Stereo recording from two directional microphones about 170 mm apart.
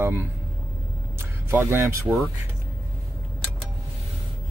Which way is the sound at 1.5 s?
15° right (ahead or behind).